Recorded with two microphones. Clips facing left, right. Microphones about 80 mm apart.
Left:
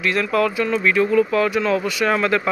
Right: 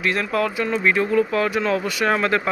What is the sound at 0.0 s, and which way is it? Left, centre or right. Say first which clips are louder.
Speech: left 2 dB; right.